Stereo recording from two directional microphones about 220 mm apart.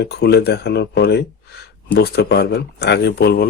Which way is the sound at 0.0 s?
50° left (ahead or behind).